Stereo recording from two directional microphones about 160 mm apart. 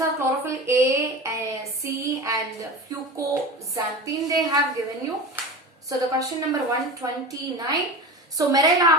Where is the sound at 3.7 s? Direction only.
20° right (ahead or behind).